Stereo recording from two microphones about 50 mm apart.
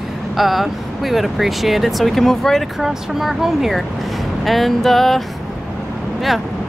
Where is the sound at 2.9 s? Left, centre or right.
Centre.